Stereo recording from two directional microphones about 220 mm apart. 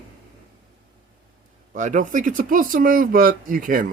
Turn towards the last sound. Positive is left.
turn(degrees=-40)  # may be behind; listen again after turning